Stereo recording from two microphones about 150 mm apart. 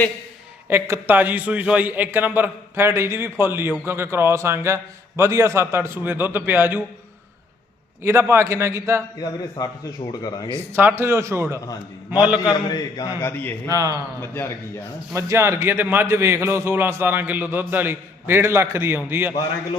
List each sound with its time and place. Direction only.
0.7 s a man's voice: 15° right (ahead or behind)
8.0 s a man's voice: 15° right (ahead or behind)
9.1 s a man's voice: 25° left (ahead or behind)
10.5 s a man's voice: 15° right (ahead or behind)
12.4 s a man's voice: 25° left (ahead or behind)
13.7 s a man's voice: 20° right (ahead or behind)
14.2 s speech: 15° left (ahead or behind)
15.1 s a man's voice: 20° right (ahead or behind)